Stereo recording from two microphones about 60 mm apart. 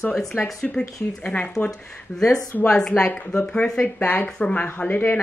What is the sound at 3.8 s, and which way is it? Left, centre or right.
Speech, left.